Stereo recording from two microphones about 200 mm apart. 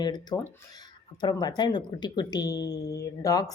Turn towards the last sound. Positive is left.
turn(degrees=15)  # may be behind; listen again after turning